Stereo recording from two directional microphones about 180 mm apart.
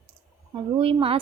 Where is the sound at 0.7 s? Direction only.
30° right (ahead or behind).